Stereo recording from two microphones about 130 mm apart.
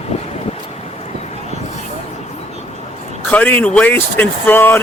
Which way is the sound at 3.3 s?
10° left (ahead or behind).